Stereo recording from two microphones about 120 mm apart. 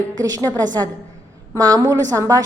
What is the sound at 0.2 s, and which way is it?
A woman's voice, 30° right (ahead or behind).